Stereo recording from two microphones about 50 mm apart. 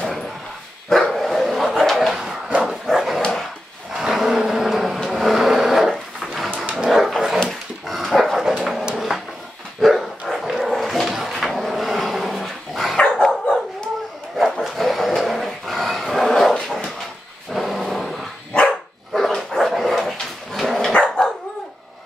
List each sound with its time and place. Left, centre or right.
0.8 s dog: centre
2.0 s a sound: centre
2.6 s dog: centre
3.9 s vehicle: centre
6.7 s dog: centre
9.1 s a sound: centre
9.8 s dog: centre
12.9 s dog: centre
14.3 s dog: centre
17.5 s dog: centre
18.5 s dog: left
19.1 s dog: centre
20.9 s dog: centre